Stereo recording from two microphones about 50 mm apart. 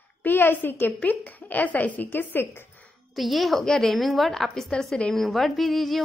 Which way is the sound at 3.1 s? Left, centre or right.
Centre.